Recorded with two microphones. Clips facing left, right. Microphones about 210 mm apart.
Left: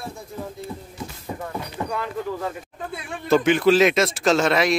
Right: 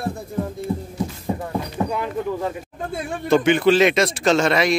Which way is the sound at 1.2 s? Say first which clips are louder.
Right 5 dB; 35° right (ahead or behind).